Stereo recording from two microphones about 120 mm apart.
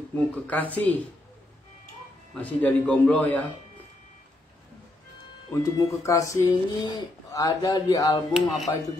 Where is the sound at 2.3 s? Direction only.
10° left (ahead or behind).